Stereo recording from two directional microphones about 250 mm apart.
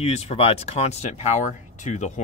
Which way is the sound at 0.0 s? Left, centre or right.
Left.